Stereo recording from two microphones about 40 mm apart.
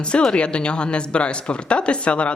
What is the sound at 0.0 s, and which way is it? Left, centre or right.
Speech, left.